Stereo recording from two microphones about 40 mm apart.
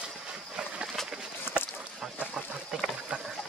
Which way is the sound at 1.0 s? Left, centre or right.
Centre.